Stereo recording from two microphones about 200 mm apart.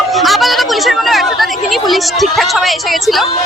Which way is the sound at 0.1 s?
Centre (ahead or behind).